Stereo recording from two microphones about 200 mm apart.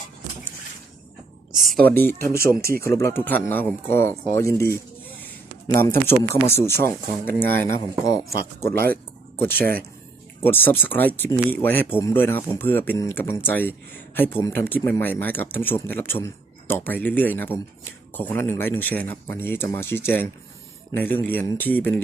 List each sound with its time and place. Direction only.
1.5 s speech: centre (ahead or behind)
2.6 s speech: 50° right (ahead or behind)
2.9 s speech: 10° left (ahead or behind)
9.4 s speech: 10° left (ahead or behind)